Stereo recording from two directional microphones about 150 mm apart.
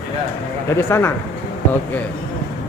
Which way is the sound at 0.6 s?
15° left (ahead or behind).